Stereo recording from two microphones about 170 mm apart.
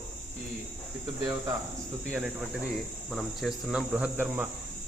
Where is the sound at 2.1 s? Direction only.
5° right (ahead or behind).